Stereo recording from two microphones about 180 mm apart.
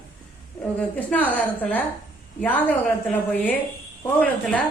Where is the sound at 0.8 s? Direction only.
10° left (ahead or behind).